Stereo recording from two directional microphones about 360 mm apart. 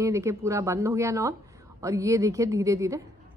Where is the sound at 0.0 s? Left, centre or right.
Centre.